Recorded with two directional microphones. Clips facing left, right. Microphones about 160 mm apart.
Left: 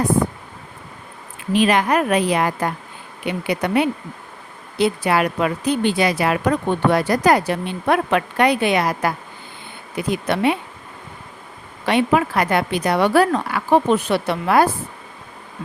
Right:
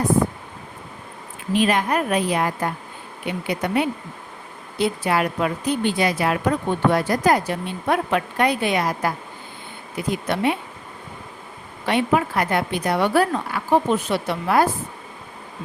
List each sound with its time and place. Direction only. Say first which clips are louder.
1.5 s a woman's voice: left 3 dB; 90° left
3.2 s speech: left 3 dB; 75° left (ahead or behind)
11.9 s speech: left 3 dB; 90° left